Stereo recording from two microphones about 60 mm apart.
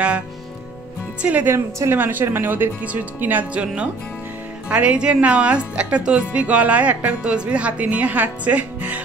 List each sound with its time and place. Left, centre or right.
1.2 s a woman's voice: right
1.5 s a woman's voice: right
2.0 s speech: right
3.6 s a woman's voice: centre